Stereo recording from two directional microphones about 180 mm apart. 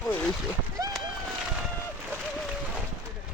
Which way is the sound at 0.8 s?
20° right (ahead or behind).